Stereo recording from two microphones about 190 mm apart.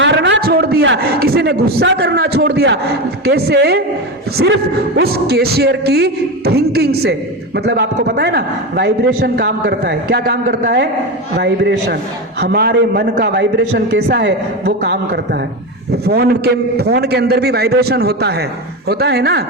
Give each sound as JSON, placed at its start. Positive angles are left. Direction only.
{"t": 0.0, "sound": "a sound", "side_deg": -70}
{"t": 3.2, "sound": "speech", "side_deg": -55}
{"t": 11.3, "sound": "speech", "side_deg": -65}